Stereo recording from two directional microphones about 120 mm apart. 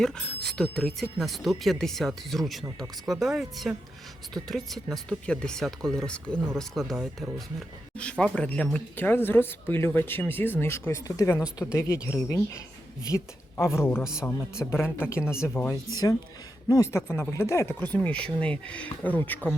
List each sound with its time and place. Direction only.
0.0 s speech: 5° left (ahead or behind)
15.7 s speech: 30° left (ahead or behind); by 19.4 s 15° left (ahead or behind)